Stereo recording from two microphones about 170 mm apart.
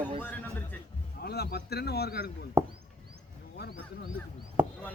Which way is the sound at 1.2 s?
65° left (ahead or behind).